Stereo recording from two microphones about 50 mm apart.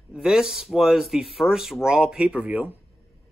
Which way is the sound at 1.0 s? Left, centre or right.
Centre.